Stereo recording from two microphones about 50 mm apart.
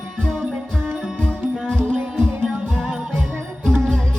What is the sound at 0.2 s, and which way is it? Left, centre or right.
Music, centre.